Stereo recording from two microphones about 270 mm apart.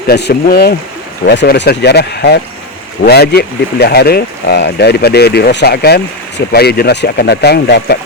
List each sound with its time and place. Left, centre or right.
0.1 s speech: left